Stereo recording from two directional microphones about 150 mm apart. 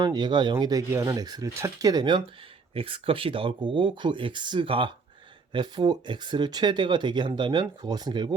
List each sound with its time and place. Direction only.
0.0 s speech: 30° right (ahead or behind)